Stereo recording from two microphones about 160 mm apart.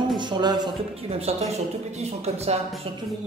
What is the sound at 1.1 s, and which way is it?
Speech, 40° right (ahead or behind).